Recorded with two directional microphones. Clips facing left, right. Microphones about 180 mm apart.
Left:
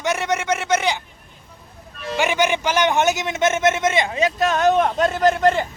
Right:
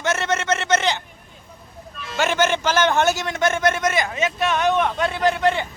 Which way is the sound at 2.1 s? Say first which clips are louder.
Even; 15° left (ahead or behind).